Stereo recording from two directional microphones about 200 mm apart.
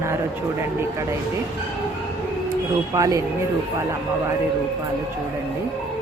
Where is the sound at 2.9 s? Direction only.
15° right (ahead or behind).